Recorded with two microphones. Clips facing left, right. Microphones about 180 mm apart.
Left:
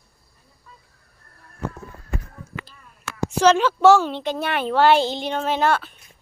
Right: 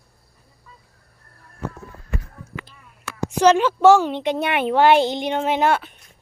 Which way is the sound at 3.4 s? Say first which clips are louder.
Right 1 dB; 10° right (ahead or behind).